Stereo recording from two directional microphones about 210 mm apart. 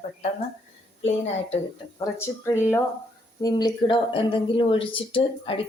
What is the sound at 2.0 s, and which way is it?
A woman's voice, 15° left (ahead or behind).